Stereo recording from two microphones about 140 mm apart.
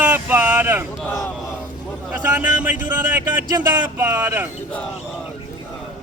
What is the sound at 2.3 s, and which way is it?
A man's voice, 10° right (ahead or behind).